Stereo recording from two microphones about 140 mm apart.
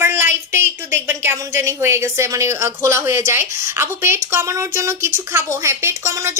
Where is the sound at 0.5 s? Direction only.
20° right (ahead or behind).